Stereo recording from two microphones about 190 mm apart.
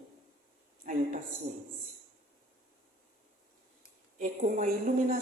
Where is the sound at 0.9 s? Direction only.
45° right (ahead or behind).